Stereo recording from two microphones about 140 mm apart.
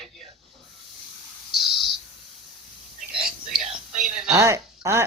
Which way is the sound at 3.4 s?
5° right (ahead or behind).